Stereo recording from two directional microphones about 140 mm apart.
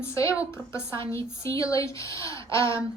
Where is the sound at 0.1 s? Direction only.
20° left (ahead or behind).